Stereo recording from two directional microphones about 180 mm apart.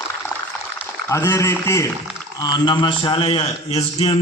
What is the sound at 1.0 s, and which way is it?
A man's voice, 15° left (ahead or behind).